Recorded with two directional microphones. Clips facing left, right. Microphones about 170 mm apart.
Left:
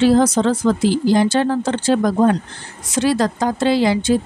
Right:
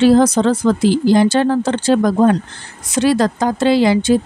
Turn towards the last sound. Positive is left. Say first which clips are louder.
# right 3 dB
turn(degrees=-70)  # may be behind; listen again after turning